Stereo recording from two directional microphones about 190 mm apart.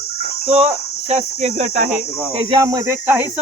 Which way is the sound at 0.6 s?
35° right (ahead or behind).